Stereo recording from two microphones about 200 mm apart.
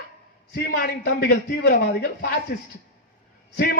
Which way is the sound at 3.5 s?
50° left (ahead or behind).